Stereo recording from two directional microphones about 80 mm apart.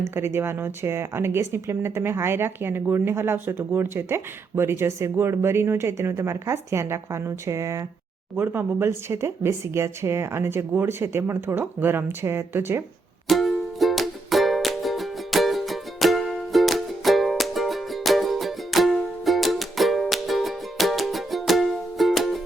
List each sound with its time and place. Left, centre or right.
0.1 s speech: right
13.2 s music: centre